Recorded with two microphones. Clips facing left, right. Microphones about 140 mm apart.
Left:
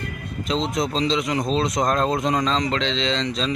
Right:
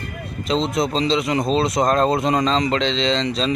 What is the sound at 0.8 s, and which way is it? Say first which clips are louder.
Speech: right 3 dB; centre (ahead or behind).